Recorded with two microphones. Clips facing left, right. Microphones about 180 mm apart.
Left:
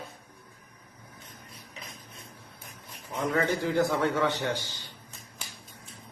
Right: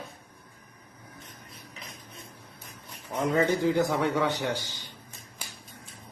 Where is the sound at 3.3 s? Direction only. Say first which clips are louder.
Right 3 dB; 20° right (ahead or behind).